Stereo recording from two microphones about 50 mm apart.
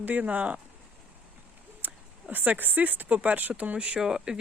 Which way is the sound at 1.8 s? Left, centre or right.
Right.